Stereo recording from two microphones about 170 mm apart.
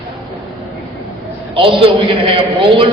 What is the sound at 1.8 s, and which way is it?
A man's voice, 30° right (ahead or behind).